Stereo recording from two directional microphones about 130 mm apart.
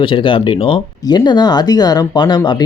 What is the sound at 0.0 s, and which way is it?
Speech, 40° left (ahead or behind).